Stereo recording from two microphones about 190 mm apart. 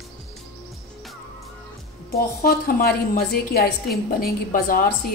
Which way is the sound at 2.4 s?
50° left (ahead or behind).